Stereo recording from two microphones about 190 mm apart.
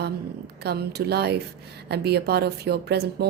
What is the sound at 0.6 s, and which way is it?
Speech, 60° right (ahead or behind).